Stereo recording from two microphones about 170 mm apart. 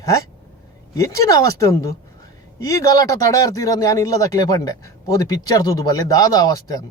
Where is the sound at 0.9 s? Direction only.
20° left (ahead or behind).